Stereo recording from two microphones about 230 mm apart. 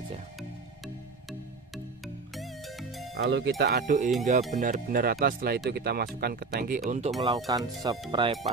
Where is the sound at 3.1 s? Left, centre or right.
Right.